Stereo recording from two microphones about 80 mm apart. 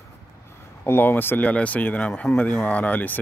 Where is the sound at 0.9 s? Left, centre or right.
Left.